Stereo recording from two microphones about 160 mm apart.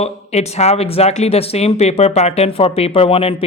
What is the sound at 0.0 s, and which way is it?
Speech, 40° left (ahead or behind).